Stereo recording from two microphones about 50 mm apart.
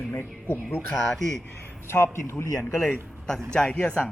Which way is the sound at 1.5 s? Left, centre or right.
Left.